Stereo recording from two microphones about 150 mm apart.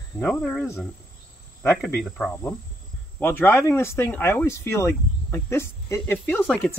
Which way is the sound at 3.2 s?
15° left (ahead or behind).